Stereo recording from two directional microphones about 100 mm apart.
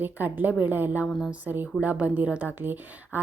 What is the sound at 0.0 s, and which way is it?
Speech, 20° right (ahead or behind).